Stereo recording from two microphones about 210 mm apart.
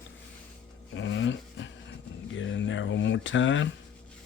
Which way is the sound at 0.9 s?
60° left (ahead or behind).